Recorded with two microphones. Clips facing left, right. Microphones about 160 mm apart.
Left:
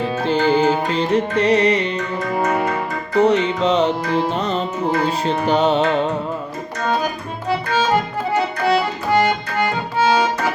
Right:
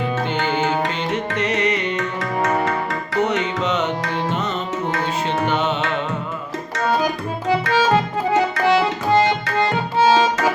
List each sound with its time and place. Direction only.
0.0 s music: 35° left (ahead or behind)
2.3 s music: 10° left (ahead or behind)
3.2 s music: 30° left (ahead or behind)